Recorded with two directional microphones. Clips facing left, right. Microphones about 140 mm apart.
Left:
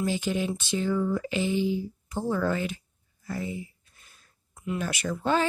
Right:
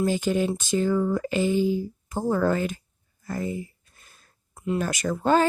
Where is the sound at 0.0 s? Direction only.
45° right (ahead or behind).